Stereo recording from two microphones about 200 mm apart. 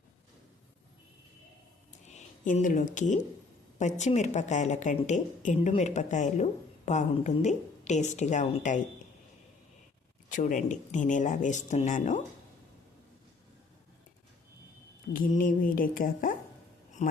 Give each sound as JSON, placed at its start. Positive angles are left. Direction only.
{"t": 2.0, "sound": "a woman's voice", "side_deg": 40}
{"t": 10.2, "sound": "a woman's voice", "side_deg": 40}
{"t": 15.1, "sound": "a woman's voice", "side_deg": 45}